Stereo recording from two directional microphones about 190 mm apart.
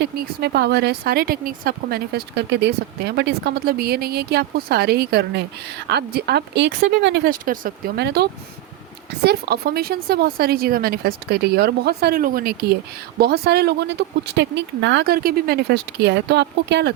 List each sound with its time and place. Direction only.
0.0 s a woman's voice: 55° right (ahead or behind)
7.3 s a woman's voice: 45° right (ahead or behind); by 16.9 s 65° right (ahead or behind)